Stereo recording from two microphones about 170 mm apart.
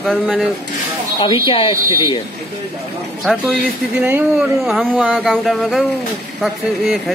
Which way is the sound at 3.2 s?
Centre (ahead or behind).